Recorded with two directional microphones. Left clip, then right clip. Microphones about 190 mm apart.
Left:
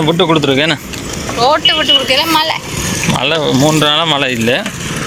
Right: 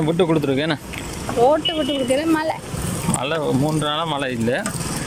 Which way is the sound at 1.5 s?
40° right (ahead or behind).